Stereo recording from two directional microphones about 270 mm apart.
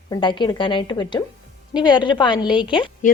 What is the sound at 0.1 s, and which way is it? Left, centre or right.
A woman's voice, centre.